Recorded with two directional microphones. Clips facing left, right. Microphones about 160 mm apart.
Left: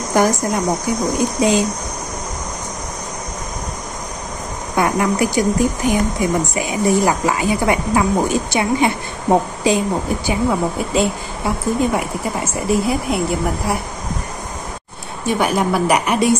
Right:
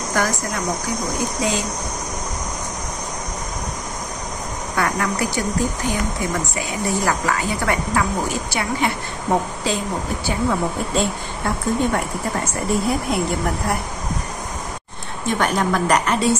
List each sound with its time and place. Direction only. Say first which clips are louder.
0.2 s speech: left 7 dB; 15° left (ahead or behind)
4.7 s speech: left 5 dB; 20° left (ahead or behind)
15.2 s speech: left 3 dB; 10° left (ahead or behind)